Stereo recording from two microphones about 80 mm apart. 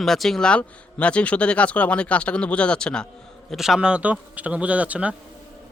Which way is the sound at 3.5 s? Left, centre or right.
Centre.